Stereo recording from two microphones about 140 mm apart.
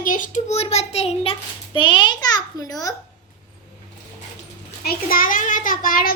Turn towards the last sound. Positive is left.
turn(degrees=85)